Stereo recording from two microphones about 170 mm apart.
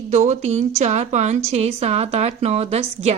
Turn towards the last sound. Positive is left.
turn(degrees=-40)  # may be behind; listen again after turning